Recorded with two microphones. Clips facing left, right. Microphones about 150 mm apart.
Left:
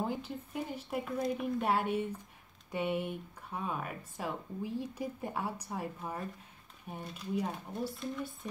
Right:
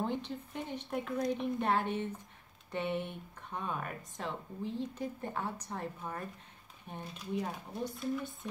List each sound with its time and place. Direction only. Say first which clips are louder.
0.0 s speech: even; 5° left (ahead or behind)